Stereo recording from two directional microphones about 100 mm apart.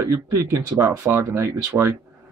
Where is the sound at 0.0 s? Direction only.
30° right (ahead or behind).